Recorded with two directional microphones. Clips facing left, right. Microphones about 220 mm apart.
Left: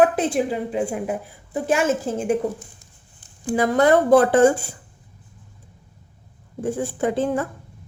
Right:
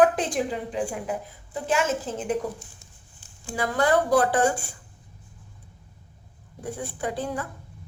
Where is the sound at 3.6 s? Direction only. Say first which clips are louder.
Left 6 dB; 20° left (ahead or behind).